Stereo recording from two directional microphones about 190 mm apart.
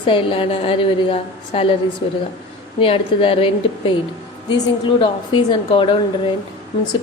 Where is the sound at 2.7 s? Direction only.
30° left (ahead or behind).